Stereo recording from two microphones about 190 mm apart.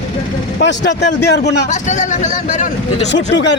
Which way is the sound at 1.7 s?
40° left (ahead or behind).